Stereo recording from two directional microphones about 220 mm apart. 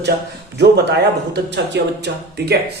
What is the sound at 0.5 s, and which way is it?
A man's voice, 50° right (ahead or behind).